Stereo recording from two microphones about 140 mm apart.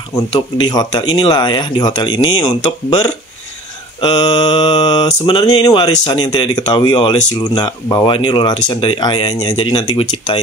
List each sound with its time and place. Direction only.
0.6 s mantra: 30° left (ahead or behind)
9.9 s speech: 45° left (ahead or behind)